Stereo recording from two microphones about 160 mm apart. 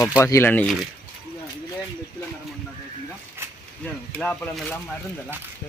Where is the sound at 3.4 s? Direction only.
15° right (ahead or behind).